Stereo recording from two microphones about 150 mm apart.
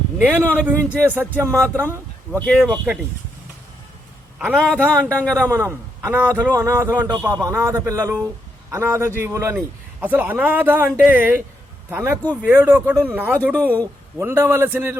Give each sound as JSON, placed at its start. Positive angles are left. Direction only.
{"t": 0.2, "sound": "a man's voice", "side_deg": -10}
{"t": 2.5, "sound": "speech", "side_deg": -5}
{"t": 4.5, "sound": "a man's voice", "side_deg": 5}
{"t": 5.5, "sound": "a man's voice", "side_deg": -15}
{"t": 13.3, "sound": "a man's voice", "side_deg": 5}
{"t": 14.2, "sound": "a man's voice", "side_deg": -15}